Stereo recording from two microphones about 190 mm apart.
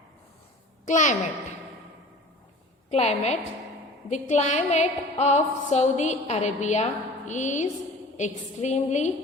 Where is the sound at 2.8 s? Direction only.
35° left (ahead or behind).